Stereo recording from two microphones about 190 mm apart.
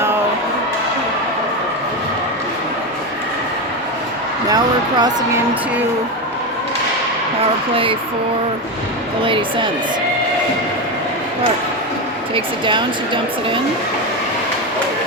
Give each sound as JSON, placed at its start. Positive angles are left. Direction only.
{"t": 4.4, "sound": "speech", "side_deg": -20}
{"t": 9.2, "sound": "speech", "side_deg": -25}
{"t": 12.3, "sound": "speech", "side_deg": -25}